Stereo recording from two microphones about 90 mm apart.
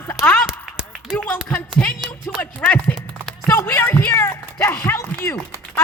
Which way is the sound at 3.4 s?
25° left (ahead or behind).